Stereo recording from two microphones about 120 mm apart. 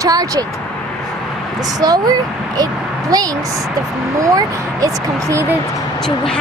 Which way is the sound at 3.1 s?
30° right (ahead or behind).